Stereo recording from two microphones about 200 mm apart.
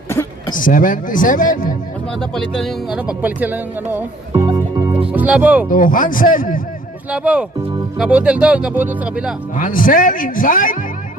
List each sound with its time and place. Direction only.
0.1 s a sound: 15° left (ahead or behind)
0.5 s speech: 45° left (ahead or behind)
2.3 s speech: centre (ahead or behind)
4.3 s music: 25° right (ahead or behind)
5.1 s speech: 10° right (ahead or behind)
5.6 s speech: 45° left (ahead or behind)
7.1 s speech: 5° right (ahead or behind)
9.6 s speech: 45° left (ahead or behind)